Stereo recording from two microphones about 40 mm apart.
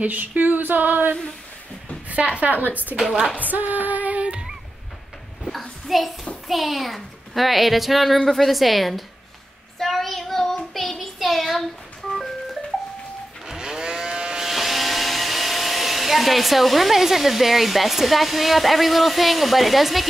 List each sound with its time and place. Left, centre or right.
0.0 s a sound: right
2.3 s a woman's voice: right
2.7 s speech: left
3.3 s female singing: right
4.3 s dog: centre
5.4 s a sound: centre
6.4 s speech: centre
9.8 s child singing: centre
13.5 s a sound: centre
14.4 s speech: centre